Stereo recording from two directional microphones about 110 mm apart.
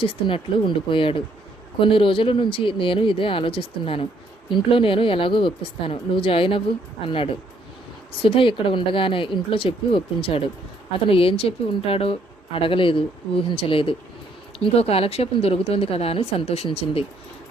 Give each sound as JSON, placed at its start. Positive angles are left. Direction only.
{"t": 0.0, "sound": "a woman's voice", "side_deg": 55}